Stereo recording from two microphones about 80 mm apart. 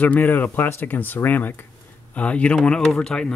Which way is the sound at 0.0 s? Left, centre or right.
Left.